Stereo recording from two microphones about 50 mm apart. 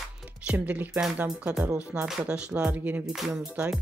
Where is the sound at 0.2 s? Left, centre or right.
Right.